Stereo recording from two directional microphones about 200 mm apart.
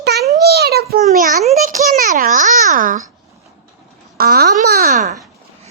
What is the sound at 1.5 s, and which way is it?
Babbling, 40° right (ahead or behind).